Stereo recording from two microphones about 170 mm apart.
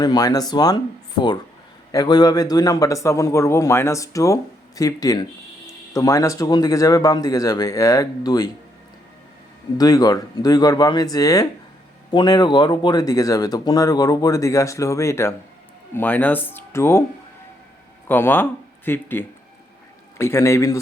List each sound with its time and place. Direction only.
0.0 s a man's voice: 25° left (ahead or behind)
1.9 s a man's voice: 20° left (ahead or behind)
9.7 s a man's voice: 20° left (ahead or behind)
18.1 s speech: 10° left (ahead or behind)